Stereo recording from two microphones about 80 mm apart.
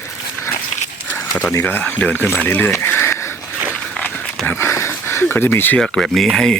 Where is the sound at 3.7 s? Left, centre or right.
Left.